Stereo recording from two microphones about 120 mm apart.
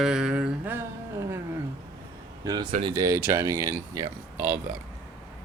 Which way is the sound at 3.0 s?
25° right (ahead or behind).